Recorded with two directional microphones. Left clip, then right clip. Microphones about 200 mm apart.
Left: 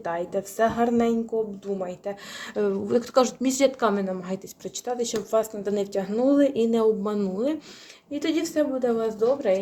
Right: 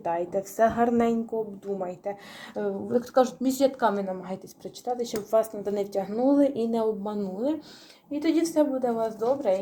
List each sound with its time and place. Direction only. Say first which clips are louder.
0.0 s a woman's voice: even; 5° left (ahead or behind)
2.6 s a woman's voice: left 4 dB; 35° left (ahead or behind)